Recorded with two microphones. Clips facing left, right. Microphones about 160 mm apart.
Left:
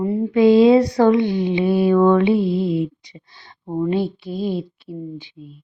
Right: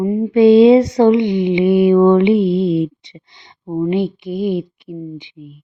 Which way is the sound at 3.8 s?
15° right (ahead or behind).